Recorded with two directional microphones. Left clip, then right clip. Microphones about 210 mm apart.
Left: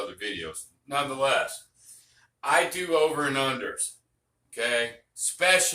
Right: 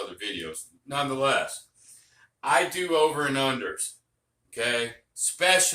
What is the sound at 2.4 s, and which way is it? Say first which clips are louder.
Speech: even; 15° right (ahead or behind).